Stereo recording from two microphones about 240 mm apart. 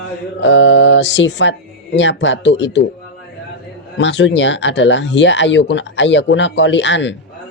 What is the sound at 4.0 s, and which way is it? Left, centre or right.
Speech, left.